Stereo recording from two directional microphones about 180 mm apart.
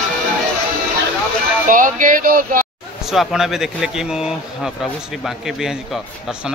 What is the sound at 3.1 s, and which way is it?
Speech, centre (ahead or behind).